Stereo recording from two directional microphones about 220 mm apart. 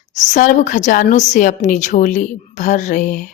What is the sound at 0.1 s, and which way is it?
A woman's voice, 35° left (ahead or behind).